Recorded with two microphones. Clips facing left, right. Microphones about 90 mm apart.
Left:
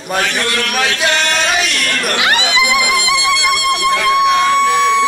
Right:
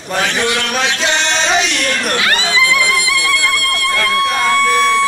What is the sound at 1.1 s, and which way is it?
Music, 20° right (ahead or behind).